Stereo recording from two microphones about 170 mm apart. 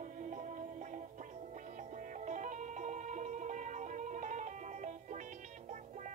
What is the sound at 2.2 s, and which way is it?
Music, 50° right (ahead or behind).